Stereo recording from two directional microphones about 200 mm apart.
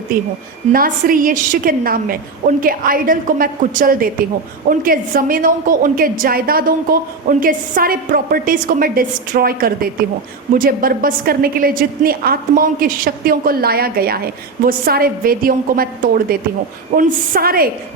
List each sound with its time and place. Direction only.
0.7 s a woman's voice: 45° right (ahead or behind)